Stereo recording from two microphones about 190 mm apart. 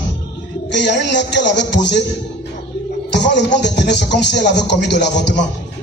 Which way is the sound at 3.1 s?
65° left (ahead or behind).